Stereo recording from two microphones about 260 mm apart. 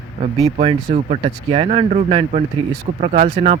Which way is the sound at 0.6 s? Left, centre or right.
Right.